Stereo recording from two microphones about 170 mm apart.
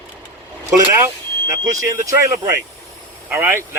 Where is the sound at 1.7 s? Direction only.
20° right (ahead or behind).